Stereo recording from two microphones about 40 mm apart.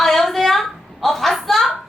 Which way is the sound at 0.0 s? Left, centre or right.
Centre.